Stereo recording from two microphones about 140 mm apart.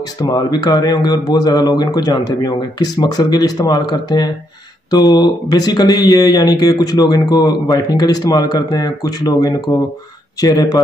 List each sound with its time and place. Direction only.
0.2 s speech: 30° left (ahead or behind)